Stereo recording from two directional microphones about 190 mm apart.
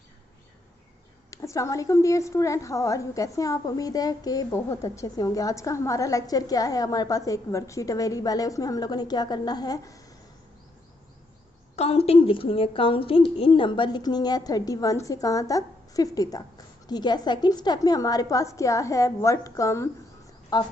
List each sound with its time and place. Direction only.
1.3 s a woman's voice: 15° left (ahead or behind)
11.8 s a woman's voice: 30° left (ahead or behind)